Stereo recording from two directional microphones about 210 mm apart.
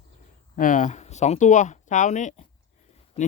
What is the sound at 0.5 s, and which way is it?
A man's voice, 40° left (ahead or behind).